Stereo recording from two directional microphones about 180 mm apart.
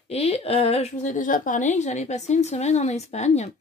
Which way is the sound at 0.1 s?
35° left (ahead or behind).